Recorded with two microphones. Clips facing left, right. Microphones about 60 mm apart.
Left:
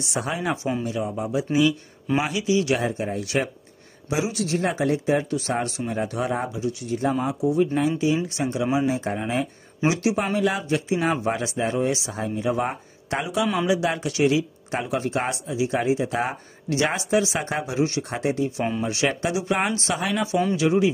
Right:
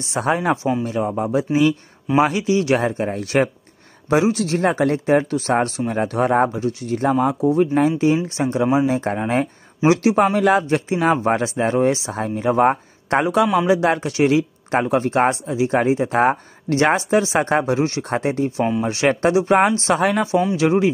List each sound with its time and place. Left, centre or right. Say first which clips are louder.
0.0 s speech: right 7 dB; right